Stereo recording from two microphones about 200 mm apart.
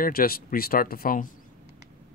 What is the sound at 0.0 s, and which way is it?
Speech, 50° left (ahead or behind).